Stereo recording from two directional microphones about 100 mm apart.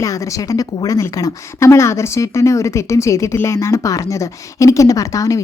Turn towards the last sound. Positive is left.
turn(degrees=35)  # may be behind; listen again after turning